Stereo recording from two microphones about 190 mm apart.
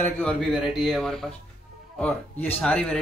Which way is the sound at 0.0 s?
5° left (ahead or behind).